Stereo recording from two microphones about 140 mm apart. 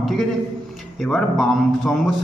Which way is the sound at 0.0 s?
Centre (ahead or behind).